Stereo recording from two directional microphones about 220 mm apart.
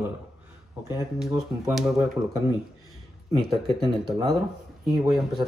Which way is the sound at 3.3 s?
25° right (ahead or behind).